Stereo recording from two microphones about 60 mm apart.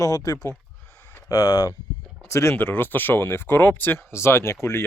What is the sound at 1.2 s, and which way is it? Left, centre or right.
Speech, left.